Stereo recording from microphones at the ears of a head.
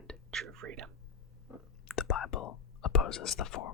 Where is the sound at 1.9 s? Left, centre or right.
Left.